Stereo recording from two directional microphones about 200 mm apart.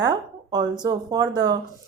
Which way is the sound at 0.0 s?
20° right (ahead or behind).